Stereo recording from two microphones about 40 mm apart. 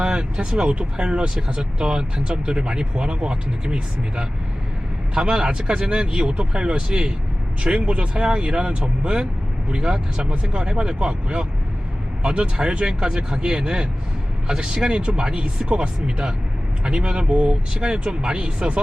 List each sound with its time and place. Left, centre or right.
0.0 s speech: right
5.1 s speech: centre
7.8 s speech: right
9.7 s speech: right